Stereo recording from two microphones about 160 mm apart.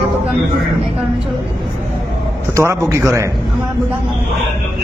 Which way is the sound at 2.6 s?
20° right (ahead or behind).